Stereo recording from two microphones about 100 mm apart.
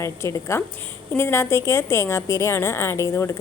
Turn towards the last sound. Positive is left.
turn(degrees=30)  # may be behind; listen again after turning